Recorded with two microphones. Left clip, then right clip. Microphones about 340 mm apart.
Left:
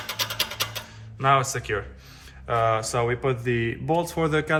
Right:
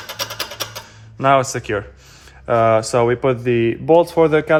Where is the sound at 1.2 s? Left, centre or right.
Right.